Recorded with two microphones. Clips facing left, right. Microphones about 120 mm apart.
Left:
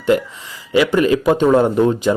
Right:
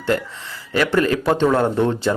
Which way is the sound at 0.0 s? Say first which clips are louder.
Left 5 dB; 15° left (ahead or behind).